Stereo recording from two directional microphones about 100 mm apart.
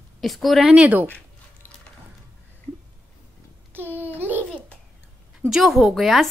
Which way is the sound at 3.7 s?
20° right (ahead or behind).